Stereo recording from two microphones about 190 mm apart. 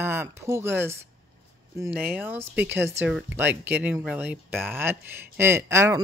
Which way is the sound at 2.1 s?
10° right (ahead or behind).